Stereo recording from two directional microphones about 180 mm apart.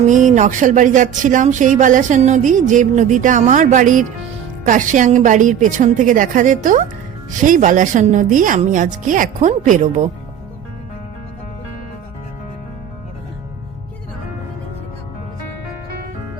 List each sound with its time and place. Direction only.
0.1 s speech: 45° right (ahead or behind)